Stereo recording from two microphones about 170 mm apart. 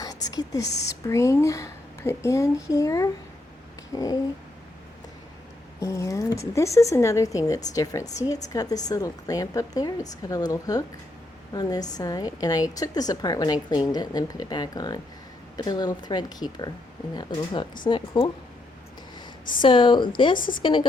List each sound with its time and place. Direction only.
0.0 s whispering: 20° left (ahead or behind)
1.0 s a woman's voice: 15° left (ahead or behind)
5.8 s a woman's voice: 20° left (ahead or behind)
19.6 s a woman's voice: 30° left (ahead or behind)